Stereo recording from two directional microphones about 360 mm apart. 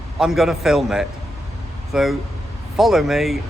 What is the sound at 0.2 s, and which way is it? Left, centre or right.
Speech, centre.